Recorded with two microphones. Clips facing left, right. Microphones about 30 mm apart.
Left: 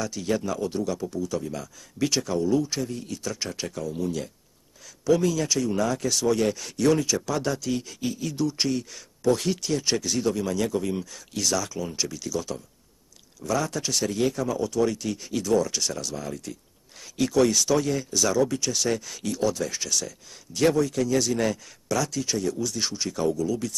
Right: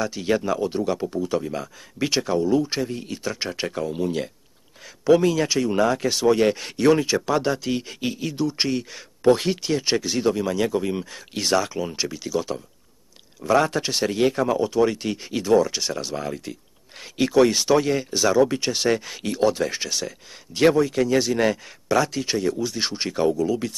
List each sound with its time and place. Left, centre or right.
0.0 s speech: right
13.5 s speech: right